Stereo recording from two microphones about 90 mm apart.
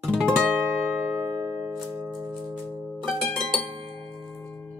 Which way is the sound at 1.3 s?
45° right (ahead or behind).